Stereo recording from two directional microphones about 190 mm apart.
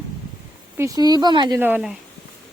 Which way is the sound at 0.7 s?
20° right (ahead or behind).